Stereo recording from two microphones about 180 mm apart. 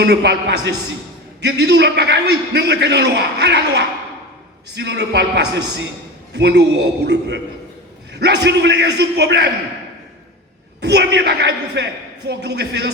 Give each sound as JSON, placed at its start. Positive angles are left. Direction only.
{"t": 0.0, "sound": "a man's voice", "side_deg": -70}
{"t": 10.8, "sound": "a man's voice", "side_deg": -70}